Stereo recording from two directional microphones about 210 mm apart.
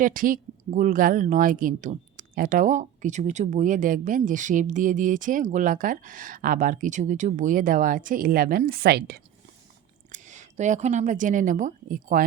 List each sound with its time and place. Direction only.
0.0 s speech: 40° right (ahead or behind)
10.1 s a woman's voice: 35° right (ahead or behind)